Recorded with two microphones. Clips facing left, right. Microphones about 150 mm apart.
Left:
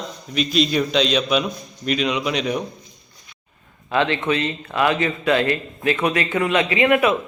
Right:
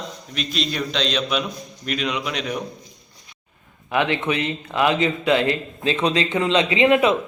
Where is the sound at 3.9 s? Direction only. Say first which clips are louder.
Left 1 dB; 15° right (ahead or behind).